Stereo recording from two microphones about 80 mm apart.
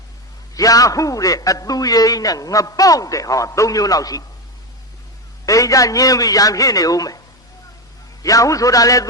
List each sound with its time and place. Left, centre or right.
0.5 s a man's voice: left
5.5 s a man's voice: left
8.2 s a man's voice: left